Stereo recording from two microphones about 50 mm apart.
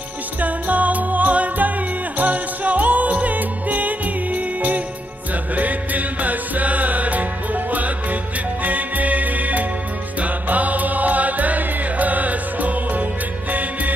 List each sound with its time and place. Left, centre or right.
0.4 s music: right